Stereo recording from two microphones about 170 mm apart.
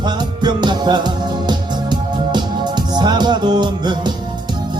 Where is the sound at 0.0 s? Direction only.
25° right (ahead or behind).